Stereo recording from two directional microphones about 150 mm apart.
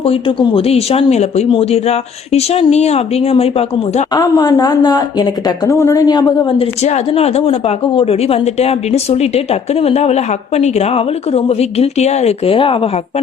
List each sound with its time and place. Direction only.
0.0 s speech: 35° left (ahead or behind)
4.1 s speech: 25° left (ahead or behind)
6.6 s speech: 45° left (ahead or behind)